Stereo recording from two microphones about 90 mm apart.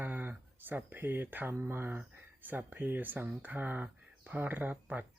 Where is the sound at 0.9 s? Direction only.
25° right (ahead or behind).